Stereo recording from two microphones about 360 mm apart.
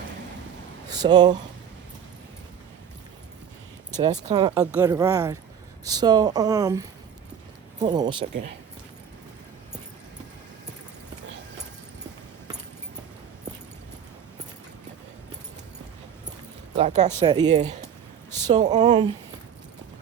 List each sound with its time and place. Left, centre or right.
0.9 s speech: centre
3.9 s speech: centre
16.7 s speech: centre